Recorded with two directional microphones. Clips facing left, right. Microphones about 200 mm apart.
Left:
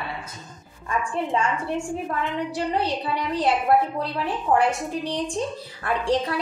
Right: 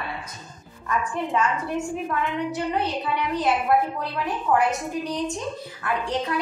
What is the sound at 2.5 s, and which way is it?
A woman's voice, 35° left (ahead or behind).